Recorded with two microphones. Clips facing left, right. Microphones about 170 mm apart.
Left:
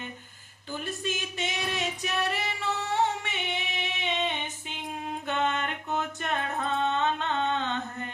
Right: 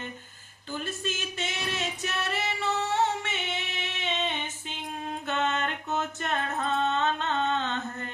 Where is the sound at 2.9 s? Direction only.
15° left (ahead or behind).